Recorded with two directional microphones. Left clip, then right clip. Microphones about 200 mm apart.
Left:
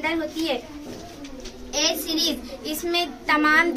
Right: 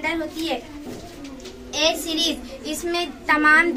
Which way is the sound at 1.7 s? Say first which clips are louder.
Right 2 dB; 5° right (ahead or behind).